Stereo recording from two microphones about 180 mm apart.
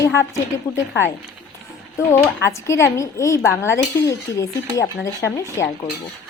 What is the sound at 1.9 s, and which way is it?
Speech, 15° left (ahead or behind).